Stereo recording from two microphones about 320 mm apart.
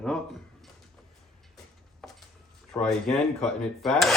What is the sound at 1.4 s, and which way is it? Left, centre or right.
Vehicle, centre.